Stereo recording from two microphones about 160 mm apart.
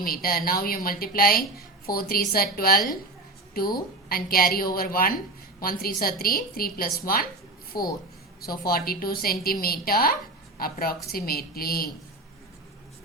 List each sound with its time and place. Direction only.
0.0 s a woman's voice: 65° left (ahead or behind)